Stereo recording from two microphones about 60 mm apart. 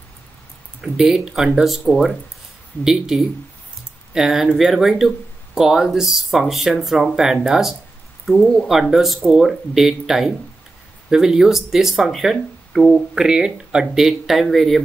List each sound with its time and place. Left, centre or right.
0.9 s speech: centre
2.8 s speech: centre